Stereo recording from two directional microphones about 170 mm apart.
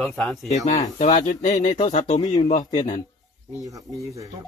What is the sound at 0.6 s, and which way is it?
Speech, 45° left (ahead or behind).